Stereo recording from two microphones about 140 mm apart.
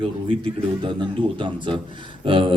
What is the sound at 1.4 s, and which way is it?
Speech, 35° right (ahead or behind).